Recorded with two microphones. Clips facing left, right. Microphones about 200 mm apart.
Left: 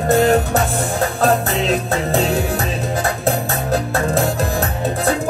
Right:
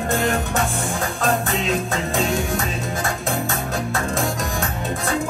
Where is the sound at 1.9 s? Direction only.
35° left (ahead or behind).